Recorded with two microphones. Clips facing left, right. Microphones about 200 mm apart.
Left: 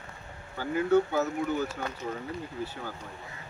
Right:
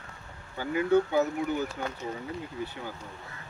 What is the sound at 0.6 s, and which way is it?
Speech, 15° right (ahead or behind).